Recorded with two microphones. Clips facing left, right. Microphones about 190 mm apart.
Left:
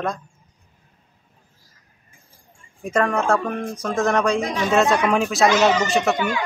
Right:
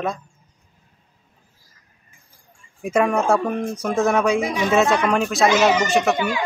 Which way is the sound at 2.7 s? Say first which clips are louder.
Right 2 dB; 10° right (ahead or behind).